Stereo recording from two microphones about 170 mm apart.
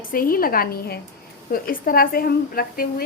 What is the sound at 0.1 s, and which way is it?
A woman's voice, 60° left (ahead or behind).